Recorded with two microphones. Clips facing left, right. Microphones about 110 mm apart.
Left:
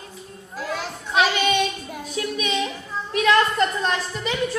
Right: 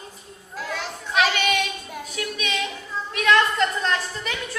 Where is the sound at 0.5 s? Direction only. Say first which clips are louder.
Left 2 dB; 20° left (ahead or behind).